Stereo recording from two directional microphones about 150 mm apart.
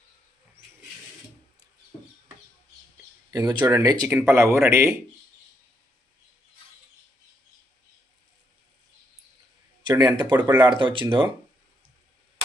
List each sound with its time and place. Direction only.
3.3 s speech: 30° right (ahead or behind)
9.8 s speech: 25° right (ahead or behind)